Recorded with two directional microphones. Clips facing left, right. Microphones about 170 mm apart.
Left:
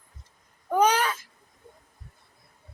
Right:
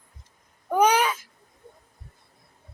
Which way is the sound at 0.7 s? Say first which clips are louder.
Right 2 dB; 15° right (ahead or behind).